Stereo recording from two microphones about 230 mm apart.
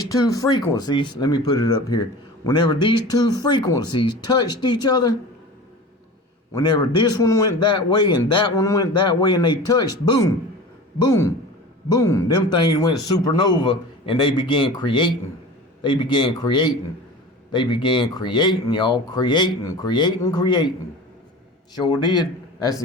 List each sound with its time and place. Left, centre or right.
0.1 s speech: centre
6.5 s a man's voice: centre
21.8 s a man's voice: centre